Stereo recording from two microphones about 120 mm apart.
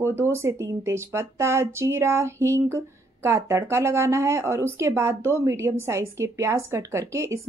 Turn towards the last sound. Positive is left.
turn(degrees=-25)  # may be behind; listen again after turning